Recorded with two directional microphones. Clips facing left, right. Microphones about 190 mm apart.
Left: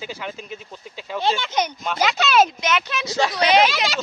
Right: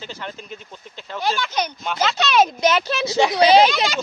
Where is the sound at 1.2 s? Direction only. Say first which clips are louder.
Left 1 dB; 25° left (ahead or behind).